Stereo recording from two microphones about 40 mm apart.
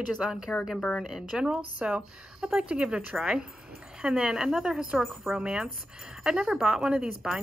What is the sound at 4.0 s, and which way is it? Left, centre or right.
A woman's voice, centre.